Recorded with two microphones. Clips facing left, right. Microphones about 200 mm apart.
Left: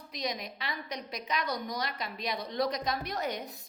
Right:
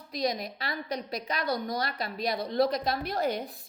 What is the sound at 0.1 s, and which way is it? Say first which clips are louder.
A woman's voice: right 6 dB; 35° right (ahead or behind).